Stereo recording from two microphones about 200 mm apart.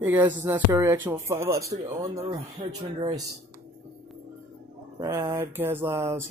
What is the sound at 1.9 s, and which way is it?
Speech, 20° right (ahead or behind).